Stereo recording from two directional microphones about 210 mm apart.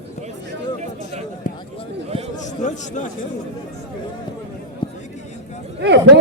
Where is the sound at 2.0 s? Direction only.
30° right (ahead or behind).